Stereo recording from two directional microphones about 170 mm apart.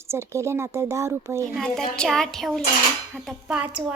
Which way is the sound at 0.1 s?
15° right (ahead or behind).